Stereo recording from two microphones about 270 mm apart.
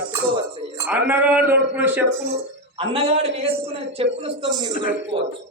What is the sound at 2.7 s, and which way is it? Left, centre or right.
A man's voice, right.